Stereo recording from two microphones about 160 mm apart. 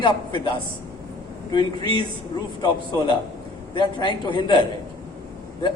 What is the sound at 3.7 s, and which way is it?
A man's voice, 30° left (ahead or behind).